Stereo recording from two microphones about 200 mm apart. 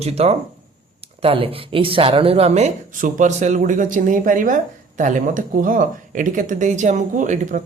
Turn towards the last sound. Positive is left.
turn(degrees=-40)  # may be behind; listen again after turning